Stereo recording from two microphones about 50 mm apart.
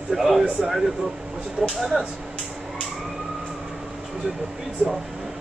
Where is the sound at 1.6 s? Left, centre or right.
Right.